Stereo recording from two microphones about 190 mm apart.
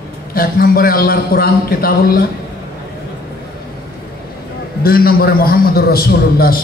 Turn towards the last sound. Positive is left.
turn(degrees=55)  # may be behind; listen again after turning